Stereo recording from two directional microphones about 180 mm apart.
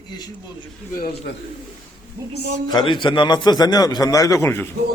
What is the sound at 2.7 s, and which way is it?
A man's voice, 25° left (ahead or behind).